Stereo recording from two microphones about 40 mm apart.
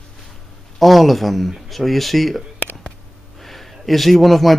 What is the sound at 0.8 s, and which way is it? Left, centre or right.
Speech, centre.